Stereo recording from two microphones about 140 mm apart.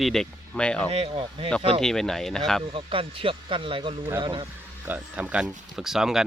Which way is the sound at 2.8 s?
40° right (ahead or behind).